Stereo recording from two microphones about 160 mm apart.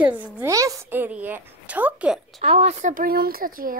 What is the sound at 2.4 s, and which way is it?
Speech, 40° right (ahead or behind).